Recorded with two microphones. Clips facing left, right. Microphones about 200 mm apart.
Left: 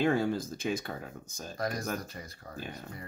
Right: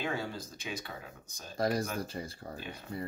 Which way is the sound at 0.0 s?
50° left (ahead or behind).